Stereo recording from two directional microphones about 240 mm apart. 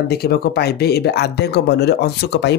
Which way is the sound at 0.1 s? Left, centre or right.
Left.